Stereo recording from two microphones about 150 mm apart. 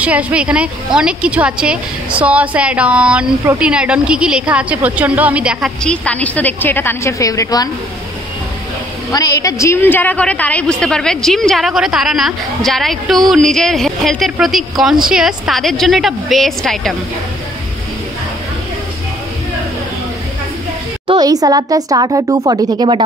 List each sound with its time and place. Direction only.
0.0 s a woman's voice: 10° right (ahead or behind)
5.9 s a woman's voice: 10° left (ahead or behind); by 7.7 s 25° left (ahead or behind)
9.1 s a woman's voice: 25° left (ahead or behind); by 16.9 s centre (ahead or behind)
21.1 s speech: 25° right (ahead or behind)